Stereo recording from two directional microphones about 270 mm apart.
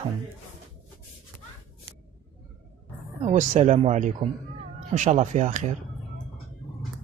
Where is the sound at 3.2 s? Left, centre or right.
Right.